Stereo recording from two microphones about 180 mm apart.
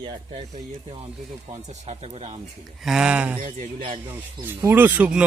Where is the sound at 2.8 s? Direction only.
5° right (ahead or behind).